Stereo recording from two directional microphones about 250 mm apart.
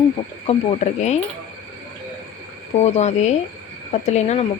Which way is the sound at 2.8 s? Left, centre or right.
Left.